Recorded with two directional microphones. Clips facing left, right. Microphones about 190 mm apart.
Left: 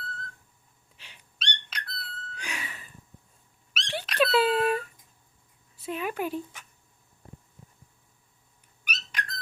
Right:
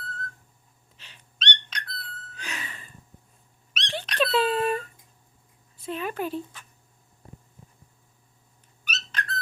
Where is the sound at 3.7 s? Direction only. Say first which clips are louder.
Right 1 dB; 5° left (ahead or behind).